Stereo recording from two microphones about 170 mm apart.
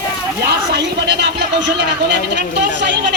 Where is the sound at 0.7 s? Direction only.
90° right.